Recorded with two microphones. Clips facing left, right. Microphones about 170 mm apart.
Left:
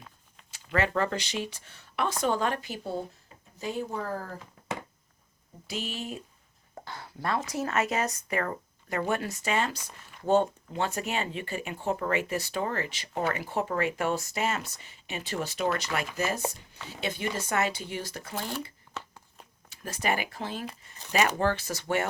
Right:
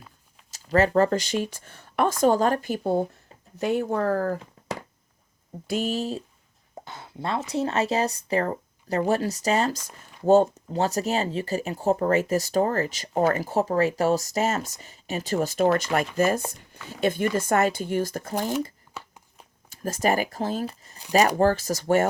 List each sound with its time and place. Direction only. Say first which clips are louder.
0.5 s speech: right 8 dB; 40° right (ahead or behind)
3.6 s speech: right 9 dB; 70° right (ahead or behind)
5.6 s speech: right 9 dB; 45° right (ahead or behind)
6.7 s speech: right 3 dB; 20° right (ahead or behind); by 18.5 s 45° right (ahead or behind)
18.9 s a sound: even; 10° right (ahead or behind)
19.7 s speech: right 6 dB; 45° right (ahead or behind)